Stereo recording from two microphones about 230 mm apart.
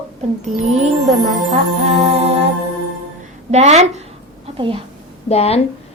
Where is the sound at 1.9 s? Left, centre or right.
Right.